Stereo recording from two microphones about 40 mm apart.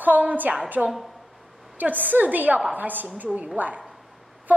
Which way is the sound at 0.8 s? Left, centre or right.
Centre.